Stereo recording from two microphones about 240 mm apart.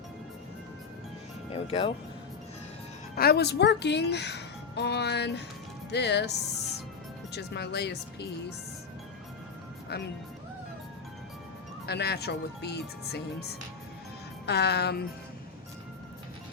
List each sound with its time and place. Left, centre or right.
1.5 s speech: left
3.2 s a child's voice: left
9.9 s a child's voice: left
11.9 s a child's voice: left